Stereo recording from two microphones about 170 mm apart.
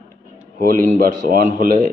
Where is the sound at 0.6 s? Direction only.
50° right (ahead or behind).